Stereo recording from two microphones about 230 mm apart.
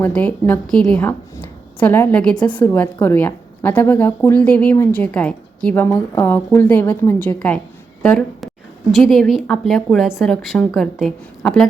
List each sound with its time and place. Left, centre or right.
0.0 s a woman's voice: centre